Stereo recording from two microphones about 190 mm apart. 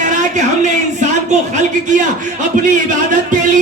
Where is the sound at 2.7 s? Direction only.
40° right (ahead or behind).